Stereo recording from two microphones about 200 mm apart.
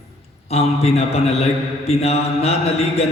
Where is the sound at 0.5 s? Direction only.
30° left (ahead or behind).